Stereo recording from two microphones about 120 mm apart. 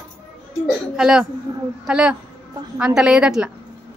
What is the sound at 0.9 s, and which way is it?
Speech, 5° right (ahead or behind).